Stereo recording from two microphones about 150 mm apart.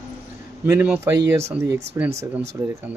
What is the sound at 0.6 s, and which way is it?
Speech, 15° right (ahead or behind).